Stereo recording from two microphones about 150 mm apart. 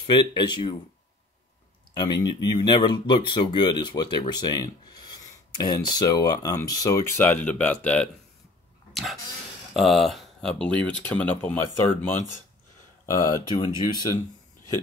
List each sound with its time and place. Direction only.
0.0 s speech: 30° left (ahead or behind)
2.0 s speech: 30° left (ahead or behind); by 8.1 s 10° left (ahead or behind)
8.9 s a sound: centre (ahead or behind)
9.8 s speech: centre (ahead or behind)
13.0 s speech: 20° left (ahead or behind)